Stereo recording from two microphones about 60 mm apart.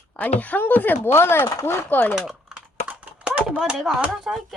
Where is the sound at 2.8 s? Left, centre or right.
Right.